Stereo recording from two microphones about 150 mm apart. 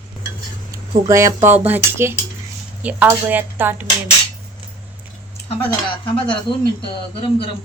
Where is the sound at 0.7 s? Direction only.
20° right (ahead or behind).